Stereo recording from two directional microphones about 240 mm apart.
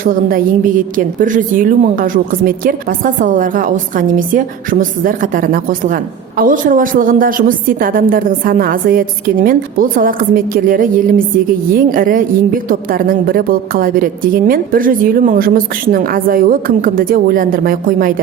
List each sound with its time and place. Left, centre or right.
0.0 s a woman's voice: right